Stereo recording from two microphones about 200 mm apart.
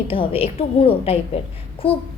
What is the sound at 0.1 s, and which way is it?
A woman's voice, 30° left (ahead or behind).